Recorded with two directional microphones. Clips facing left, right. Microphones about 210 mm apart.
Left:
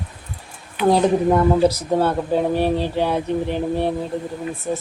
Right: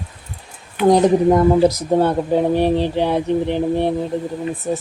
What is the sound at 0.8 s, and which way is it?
Speech, 15° right (ahead or behind).